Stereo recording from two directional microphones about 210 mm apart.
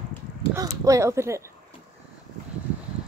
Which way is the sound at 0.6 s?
15° right (ahead or behind).